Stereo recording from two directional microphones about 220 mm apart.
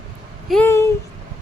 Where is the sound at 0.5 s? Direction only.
10° left (ahead or behind).